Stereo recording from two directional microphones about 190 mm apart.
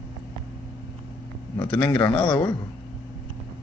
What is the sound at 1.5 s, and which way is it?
Speech, 25° left (ahead or behind).